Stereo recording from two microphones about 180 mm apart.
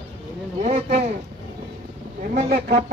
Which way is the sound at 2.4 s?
55° right (ahead or behind).